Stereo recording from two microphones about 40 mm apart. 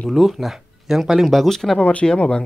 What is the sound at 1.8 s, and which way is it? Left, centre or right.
Speech, left.